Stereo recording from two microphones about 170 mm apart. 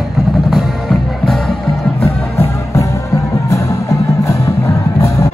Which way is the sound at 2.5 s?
20° left (ahead or behind).